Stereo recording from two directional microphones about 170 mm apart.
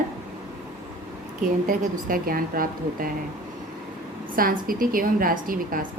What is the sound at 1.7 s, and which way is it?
A woman's voice, 55° right (ahead or behind).